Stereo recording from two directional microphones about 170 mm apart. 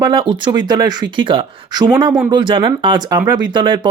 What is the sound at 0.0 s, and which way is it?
Speech, 25° right (ahead or behind).